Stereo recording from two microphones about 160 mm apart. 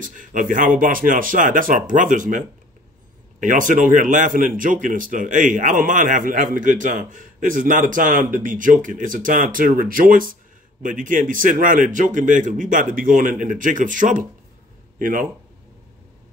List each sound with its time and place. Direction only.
0.0 s speech: 55° right (ahead or behind)